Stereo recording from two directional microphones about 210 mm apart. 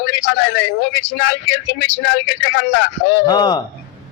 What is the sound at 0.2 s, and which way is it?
Speech, 55° left (ahead or behind).